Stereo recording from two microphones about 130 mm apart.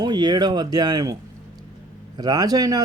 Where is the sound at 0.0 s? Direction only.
35° right (ahead or behind).